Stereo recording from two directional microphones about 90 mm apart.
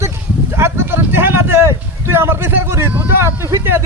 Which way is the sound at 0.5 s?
25° right (ahead or behind).